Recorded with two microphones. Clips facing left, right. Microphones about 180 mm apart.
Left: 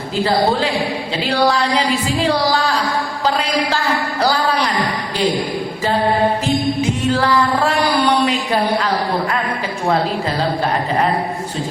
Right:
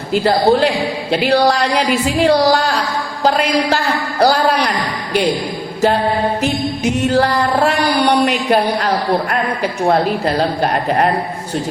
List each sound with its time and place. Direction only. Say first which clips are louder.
0.1 s a woman's voice: right 4 dB; 65° right (ahead or behind)
1.7 s a woman's voice: right 2 dB; 65° right (ahead or behind)
4.2 s a sound: right 5 dB; 60° right (ahead or behind)
7.1 s music: right 2 dB; 55° right (ahead or behind)
8.2 s a sound: right 3 dB; 60° right (ahead or behind)
9.9 s a woman's voice: right 2 dB; 60° right (ahead or behind)